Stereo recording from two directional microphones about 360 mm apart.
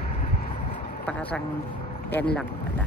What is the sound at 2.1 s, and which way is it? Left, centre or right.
Speech, centre.